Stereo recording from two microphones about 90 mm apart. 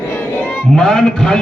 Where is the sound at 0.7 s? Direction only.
5° left (ahead or behind).